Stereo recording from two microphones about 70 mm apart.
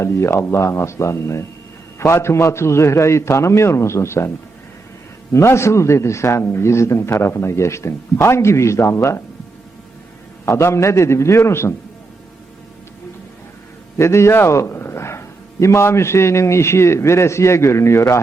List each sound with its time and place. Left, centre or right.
0.0 s a man's voice: left
5.3 s a man's voice: left
10.4 s a man's voice: left
14.0 s a man's voice: left